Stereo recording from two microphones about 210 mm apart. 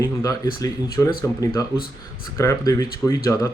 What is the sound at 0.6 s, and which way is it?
Speech, 15° left (ahead or behind).